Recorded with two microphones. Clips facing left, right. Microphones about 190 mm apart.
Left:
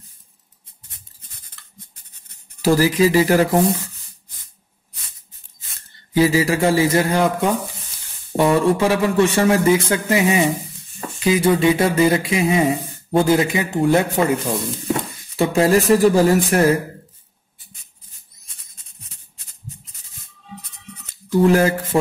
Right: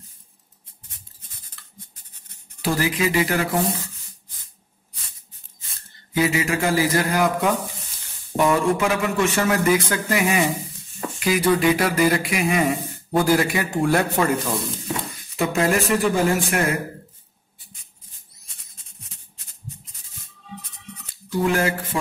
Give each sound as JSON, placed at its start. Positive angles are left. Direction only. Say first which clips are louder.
{"t": 2.6, "sound": "speech", "louder": "left 7 dB", "side_deg": 35}
{"t": 6.1, "sound": "speech", "louder": "left 5 dB", "side_deg": 30}
{"t": 15.3, "sound": "speech", "louder": "left 5 dB", "side_deg": 30}
{"t": 21.3, "sound": "speech", "louder": "left 6 dB", "side_deg": 40}